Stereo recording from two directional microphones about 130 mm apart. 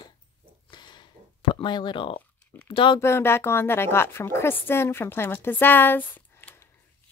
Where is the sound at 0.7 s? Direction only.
35° left (ahead or behind).